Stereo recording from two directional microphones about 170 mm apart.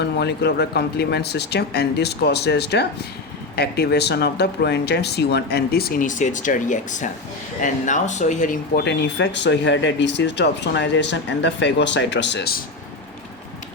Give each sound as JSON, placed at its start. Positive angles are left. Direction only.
{"t": 0.0, "sound": "speech", "side_deg": 80}
{"t": 8.8, "sound": "speech", "side_deg": 90}